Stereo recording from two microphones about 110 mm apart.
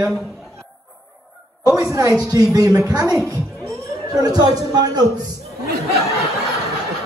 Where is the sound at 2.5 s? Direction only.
30° right (ahead or behind).